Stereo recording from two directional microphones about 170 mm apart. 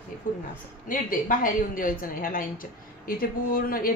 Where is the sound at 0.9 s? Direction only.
55° left (ahead or behind).